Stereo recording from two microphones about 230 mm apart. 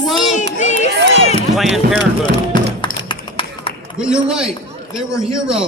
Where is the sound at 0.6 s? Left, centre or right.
Left.